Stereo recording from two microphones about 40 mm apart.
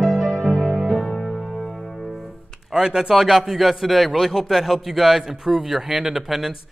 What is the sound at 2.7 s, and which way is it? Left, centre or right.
A man's voice, centre.